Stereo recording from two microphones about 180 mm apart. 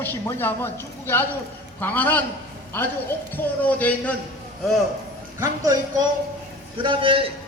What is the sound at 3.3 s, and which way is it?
Speech, 10° left (ahead or behind).